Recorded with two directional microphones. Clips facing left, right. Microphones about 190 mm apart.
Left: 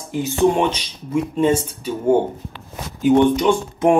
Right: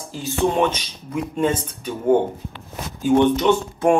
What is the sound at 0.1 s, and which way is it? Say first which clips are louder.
Speech: left 4 dB; 15° left (ahead or behind).